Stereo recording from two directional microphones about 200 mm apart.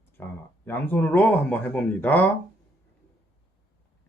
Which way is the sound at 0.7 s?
10° left (ahead or behind).